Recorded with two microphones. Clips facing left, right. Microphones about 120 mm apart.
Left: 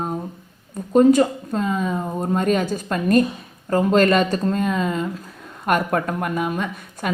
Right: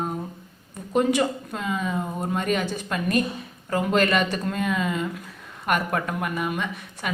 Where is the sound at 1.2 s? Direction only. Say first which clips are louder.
Left 6 dB; 40° left (ahead or behind).